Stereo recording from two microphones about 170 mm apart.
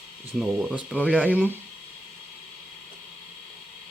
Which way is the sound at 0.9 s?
10° left (ahead or behind).